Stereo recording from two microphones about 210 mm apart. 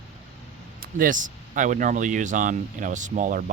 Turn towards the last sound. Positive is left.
turn(degrees=-40)  # may be behind; listen again after turning